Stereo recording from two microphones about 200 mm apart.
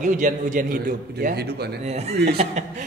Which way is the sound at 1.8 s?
30° right (ahead or behind).